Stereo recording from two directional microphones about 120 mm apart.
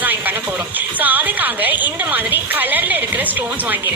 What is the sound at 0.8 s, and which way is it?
A woman's voice, 15° right (ahead or behind).